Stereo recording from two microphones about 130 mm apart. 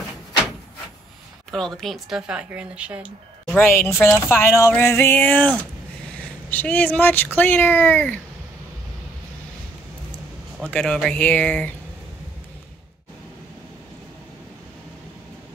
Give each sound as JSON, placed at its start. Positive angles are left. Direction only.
{"t": 1.5, "sound": "speech", "side_deg": 0}
{"t": 3.5, "sound": "speech", "side_deg": 20}
{"t": 10.7, "sound": "speech", "side_deg": 5}